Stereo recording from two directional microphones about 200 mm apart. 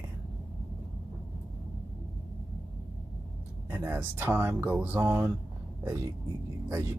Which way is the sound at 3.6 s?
10° right (ahead or behind).